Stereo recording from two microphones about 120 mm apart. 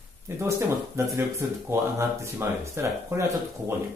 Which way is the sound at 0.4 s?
20° right (ahead or behind).